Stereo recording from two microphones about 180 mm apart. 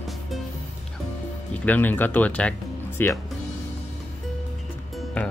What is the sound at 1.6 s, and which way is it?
Speech, 10° left (ahead or behind).